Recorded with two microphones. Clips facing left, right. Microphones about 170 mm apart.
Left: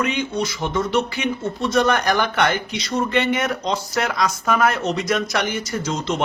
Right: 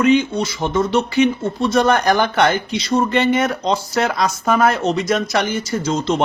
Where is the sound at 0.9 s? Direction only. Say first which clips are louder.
Right 6 dB; 25° right (ahead or behind).